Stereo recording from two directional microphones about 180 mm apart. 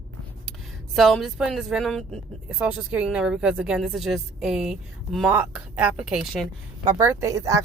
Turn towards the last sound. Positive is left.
turn(degrees=-20)  # may be behind; listen again after turning